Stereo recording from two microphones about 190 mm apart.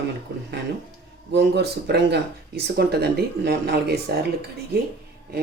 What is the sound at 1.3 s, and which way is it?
Speech, 60° right (ahead or behind).